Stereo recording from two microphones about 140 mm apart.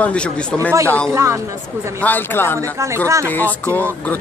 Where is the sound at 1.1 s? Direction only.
20° right (ahead or behind).